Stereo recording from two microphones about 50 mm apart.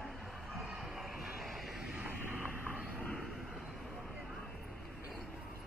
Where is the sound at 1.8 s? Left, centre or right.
Centre.